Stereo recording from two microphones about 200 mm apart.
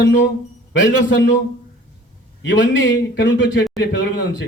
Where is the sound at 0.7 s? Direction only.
65° left (ahead or behind).